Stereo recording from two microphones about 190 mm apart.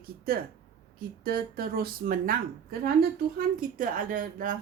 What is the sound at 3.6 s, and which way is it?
A woman's voice, 45° right (ahead or behind).